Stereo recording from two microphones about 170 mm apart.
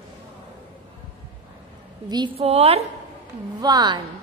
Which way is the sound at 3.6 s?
25° right (ahead or behind).